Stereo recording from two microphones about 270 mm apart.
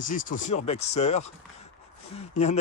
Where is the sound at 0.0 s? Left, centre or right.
Left.